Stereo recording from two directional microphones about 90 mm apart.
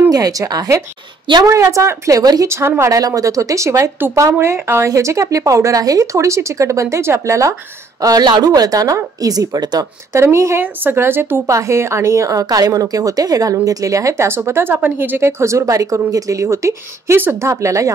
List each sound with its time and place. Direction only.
0.1 s a woman's voice: 40° right (ahead or behind)
2.4 s speech: 30° right (ahead or behind)
2.8 s a woman's voice: 40° right (ahead or behind)
8.0 s speech: 50° right (ahead or behind)
10.1 s a woman's voice: 30° right (ahead or behind)
17.2 s speech: 25° right (ahead or behind)
17.5 s a woman's voice: 35° right (ahead or behind)